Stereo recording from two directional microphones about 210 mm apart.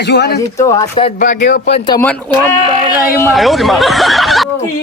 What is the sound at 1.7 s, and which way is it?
Speech, 20° left (ahead or behind).